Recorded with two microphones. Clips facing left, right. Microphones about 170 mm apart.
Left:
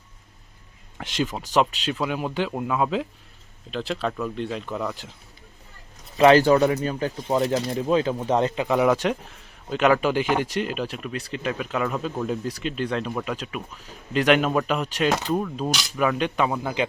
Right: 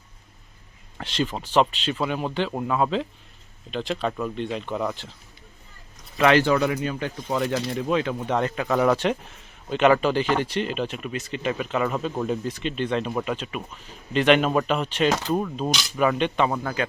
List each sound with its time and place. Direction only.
0.9 s speech: 10° left (ahead or behind); by 4.9 s 5° right (ahead or behind)
6.1 s speech: 35° left (ahead or behind); by 16.7 s 5° left (ahead or behind)